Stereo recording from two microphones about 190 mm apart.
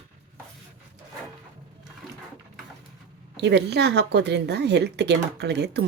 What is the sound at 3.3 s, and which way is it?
Speech, 60° right (ahead or behind).